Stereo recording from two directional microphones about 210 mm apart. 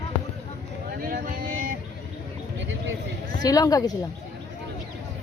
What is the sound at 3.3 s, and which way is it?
Speech, 20° left (ahead or behind).